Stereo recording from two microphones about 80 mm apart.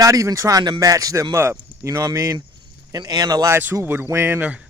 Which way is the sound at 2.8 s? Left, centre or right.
Right.